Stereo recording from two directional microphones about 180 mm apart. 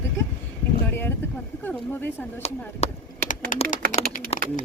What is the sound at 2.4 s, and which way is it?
Speech, 40° left (ahead or behind).